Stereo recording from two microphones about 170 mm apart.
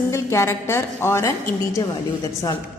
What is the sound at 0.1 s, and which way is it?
A woman's voice, 15° left (ahead or behind).